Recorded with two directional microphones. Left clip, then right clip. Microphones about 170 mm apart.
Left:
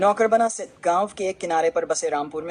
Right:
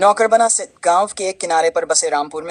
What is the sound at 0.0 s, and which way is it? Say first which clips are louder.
Speech: right 6 dB; 30° right (ahead or behind).